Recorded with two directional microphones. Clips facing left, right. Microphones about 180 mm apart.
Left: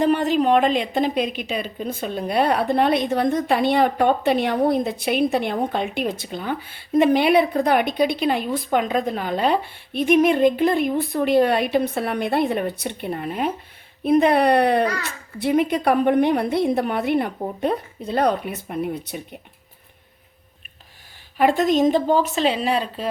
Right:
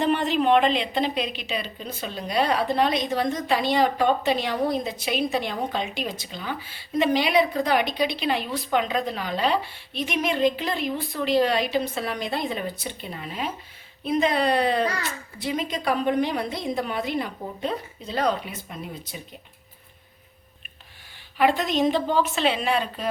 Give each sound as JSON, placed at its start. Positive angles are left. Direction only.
{"t": 0.0, "sound": "a woman's voice", "side_deg": 40}
{"t": 21.3, "sound": "a woman's voice", "side_deg": 45}